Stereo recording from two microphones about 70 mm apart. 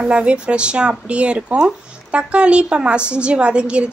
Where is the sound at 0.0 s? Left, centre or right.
Centre.